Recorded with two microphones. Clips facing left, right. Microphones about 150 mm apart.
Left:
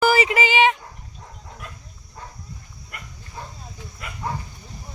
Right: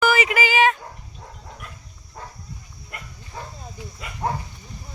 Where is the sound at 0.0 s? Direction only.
30° left (ahead or behind).